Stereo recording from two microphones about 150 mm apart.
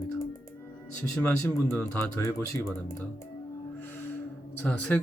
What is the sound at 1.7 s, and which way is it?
Speech, 20° left (ahead or behind).